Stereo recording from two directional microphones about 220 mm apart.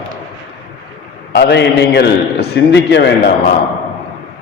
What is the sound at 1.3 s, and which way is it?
A man's voice, 50° left (ahead or behind).